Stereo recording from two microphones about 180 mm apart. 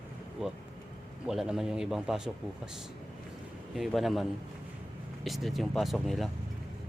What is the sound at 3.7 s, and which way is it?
Speech, centre (ahead or behind).